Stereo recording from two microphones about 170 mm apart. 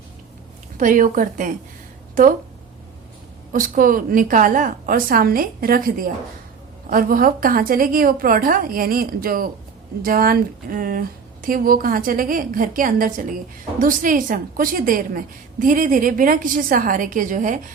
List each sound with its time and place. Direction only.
0.8 s a woman's voice: 50° right (ahead or behind)
3.5 s a woman's voice: 55° right (ahead or behind)